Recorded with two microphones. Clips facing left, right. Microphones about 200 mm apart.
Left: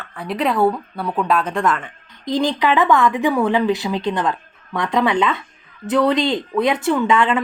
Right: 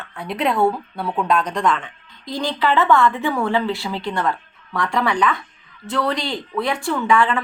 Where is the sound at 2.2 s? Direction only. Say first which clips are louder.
Left 3 dB; 15° left (ahead or behind).